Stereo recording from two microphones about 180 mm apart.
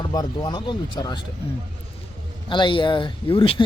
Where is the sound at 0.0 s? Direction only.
25° left (ahead or behind).